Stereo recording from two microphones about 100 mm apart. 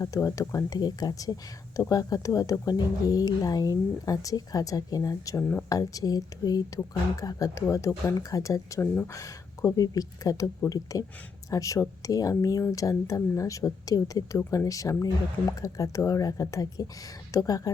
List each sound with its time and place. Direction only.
0.0 s speech: 35° left (ahead or behind)
5.4 s speech: 15° left (ahead or behind)
5.6 s speech: 40° left (ahead or behind)